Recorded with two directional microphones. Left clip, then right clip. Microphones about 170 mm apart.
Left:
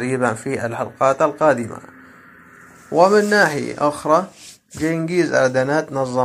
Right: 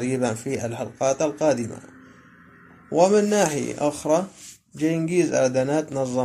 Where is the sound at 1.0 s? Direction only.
5° right (ahead or behind).